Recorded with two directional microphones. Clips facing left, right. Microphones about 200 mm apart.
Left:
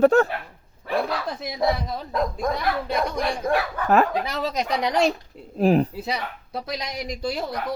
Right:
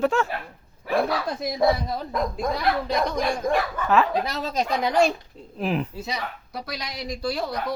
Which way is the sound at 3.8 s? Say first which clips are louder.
Left 2 dB; 50° left (ahead or behind).